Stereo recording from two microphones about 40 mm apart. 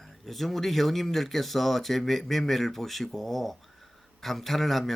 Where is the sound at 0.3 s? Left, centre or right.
Centre.